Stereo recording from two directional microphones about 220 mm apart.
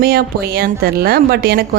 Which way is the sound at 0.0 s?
45° right (ahead or behind).